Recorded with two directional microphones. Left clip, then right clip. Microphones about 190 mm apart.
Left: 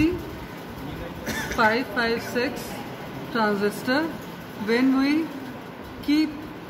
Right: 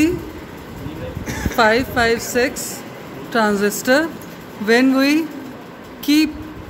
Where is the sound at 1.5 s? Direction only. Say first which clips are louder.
Right 7 dB; 45° right (ahead or behind).